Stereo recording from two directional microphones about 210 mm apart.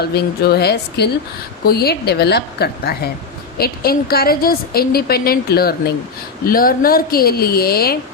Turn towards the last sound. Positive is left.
turn(degrees=45)  # may be behind; listen again after turning